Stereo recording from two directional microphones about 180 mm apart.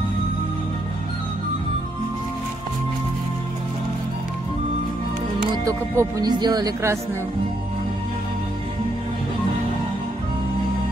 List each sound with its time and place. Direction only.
5.7 s speech: 20° right (ahead or behind)